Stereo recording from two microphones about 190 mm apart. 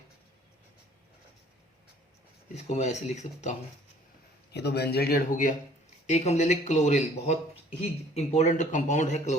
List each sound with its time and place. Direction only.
2.6 s speech: 35° left (ahead or behind)
4.5 s a man's voice: 60° left (ahead or behind); by 9.4 s 35° left (ahead or behind)